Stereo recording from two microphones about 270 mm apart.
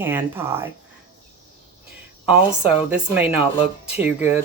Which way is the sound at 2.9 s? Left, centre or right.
Centre.